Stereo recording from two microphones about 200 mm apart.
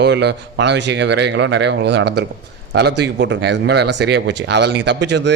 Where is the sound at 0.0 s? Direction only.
60° right (ahead or behind).